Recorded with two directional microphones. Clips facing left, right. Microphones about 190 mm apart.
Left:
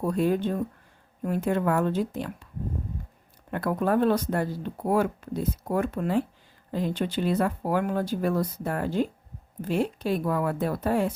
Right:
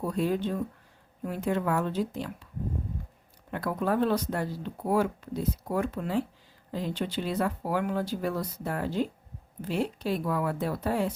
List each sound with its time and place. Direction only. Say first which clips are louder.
0.1 s speech: left 4 dB; 50° left (ahead or behind)
3.5 s speech: left 4 dB; 50° left (ahead or behind)